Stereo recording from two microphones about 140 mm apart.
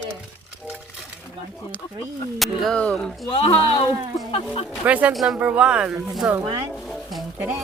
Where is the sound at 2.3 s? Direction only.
Centre (ahead or behind).